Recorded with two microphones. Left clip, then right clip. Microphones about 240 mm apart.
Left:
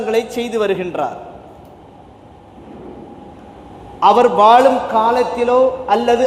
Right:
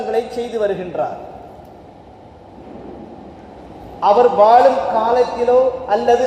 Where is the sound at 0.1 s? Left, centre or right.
Left.